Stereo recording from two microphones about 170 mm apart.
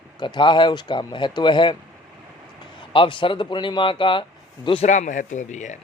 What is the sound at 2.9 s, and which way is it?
Speech, 30° left (ahead or behind).